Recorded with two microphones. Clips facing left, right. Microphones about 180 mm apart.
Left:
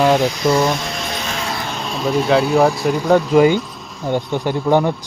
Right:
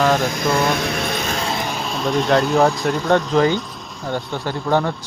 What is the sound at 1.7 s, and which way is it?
Speech, centre (ahead or behind).